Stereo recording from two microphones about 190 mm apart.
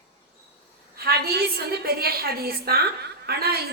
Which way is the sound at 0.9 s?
55° right (ahead or behind).